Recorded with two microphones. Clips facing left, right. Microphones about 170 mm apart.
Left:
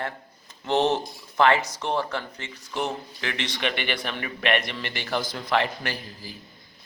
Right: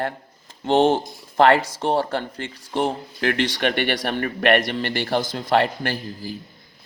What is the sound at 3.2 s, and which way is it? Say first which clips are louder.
A man's voice: right 11 dB; 50° right (ahead or behind).